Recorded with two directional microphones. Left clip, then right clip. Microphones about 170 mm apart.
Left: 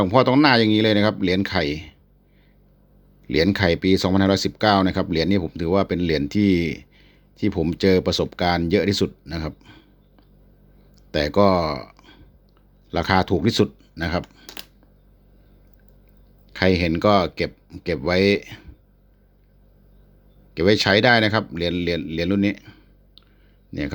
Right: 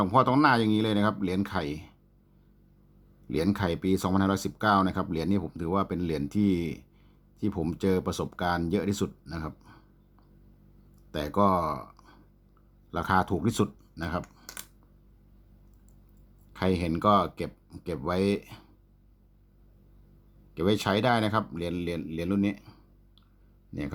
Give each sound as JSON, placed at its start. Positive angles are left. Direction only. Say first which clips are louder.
{"t": 0.0, "sound": "speech", "louder": "left 6 dB", "side_deg": 25}
{"t": 3.2, "sound": "speech", "louder": "left 10 dB", "side_deg": 25}
{"t": 8.7, "sound": "a sound", "louder": "left 10 dB", "side_deg": 25}
{"t": 11.1, "sound": "speech", "louder": "left 8 dB", "side_deg": 25}
{"t": 14.3, "sound": "computer keyboard", "louder": "left 6 dB", "side_deg": 15}
{"t": 16.5, "sound": "speech", "louder": "left 9 dB", "side_deg": 25}
{"t": 20.5, "sound": "speech", "louder": "left 10 dB", "side_deg": 25}
{"t": 22.1, "sound": "a sound", "louder": "left 8 dB", "side_deg": 25}